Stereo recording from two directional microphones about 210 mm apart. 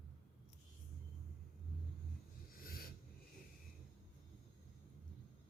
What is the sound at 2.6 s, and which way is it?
Snort, 45° left (ahead or behind).